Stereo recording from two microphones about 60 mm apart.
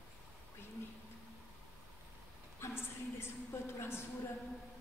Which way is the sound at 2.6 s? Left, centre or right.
Left.